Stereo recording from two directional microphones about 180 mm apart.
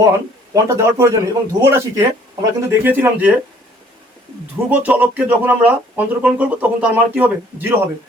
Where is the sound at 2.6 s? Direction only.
10° right (ahead or behind).